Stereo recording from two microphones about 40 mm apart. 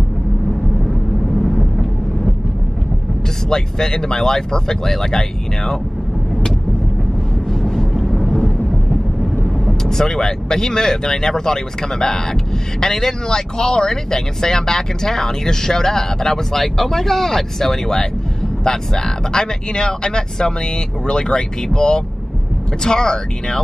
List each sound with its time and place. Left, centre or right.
0.8 s vehicle: centre
3.4 s speech: centre
7.6 s vehicle: centre
9.8 s speech: centre